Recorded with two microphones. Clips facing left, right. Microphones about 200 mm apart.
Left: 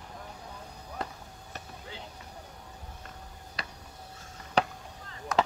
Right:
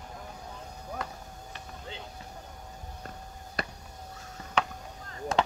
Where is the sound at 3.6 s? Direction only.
50° right (ahead or behind).